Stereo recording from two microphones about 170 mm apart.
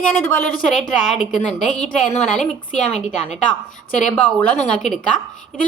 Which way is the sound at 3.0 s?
40° left (ahead or behind).